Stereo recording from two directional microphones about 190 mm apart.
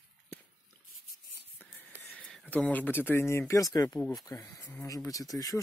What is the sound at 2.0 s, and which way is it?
Speech, centre (ahead or behind).